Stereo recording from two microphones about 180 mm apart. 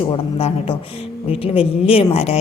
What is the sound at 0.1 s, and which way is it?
A woman's voice, 30° left (ahead or behind).